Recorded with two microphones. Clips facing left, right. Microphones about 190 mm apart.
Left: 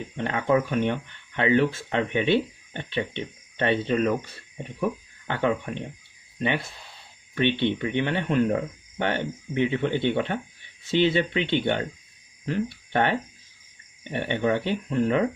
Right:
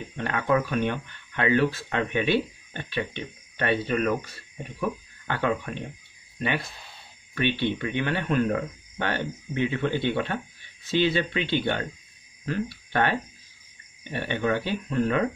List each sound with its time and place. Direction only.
0.2 s speech: 20° left (ahead or behind)
7.3 s speech: 25° left (ahead or behind)